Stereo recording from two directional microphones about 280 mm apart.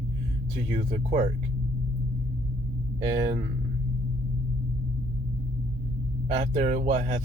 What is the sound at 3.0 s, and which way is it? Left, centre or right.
Speech, centre.